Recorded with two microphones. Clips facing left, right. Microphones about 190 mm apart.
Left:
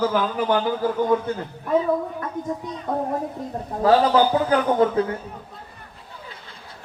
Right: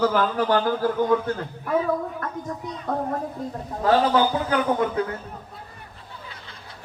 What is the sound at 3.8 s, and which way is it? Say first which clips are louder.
Speech: left 2 dB; 35° left (ahead or behind).